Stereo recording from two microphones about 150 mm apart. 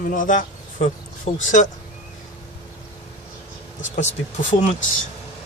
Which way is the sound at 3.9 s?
55° left (ahead or behind).